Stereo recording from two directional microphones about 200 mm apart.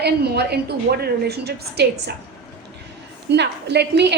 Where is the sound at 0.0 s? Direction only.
55° right (ahead or behind).